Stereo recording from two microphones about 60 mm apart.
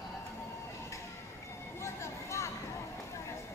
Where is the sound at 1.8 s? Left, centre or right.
Left.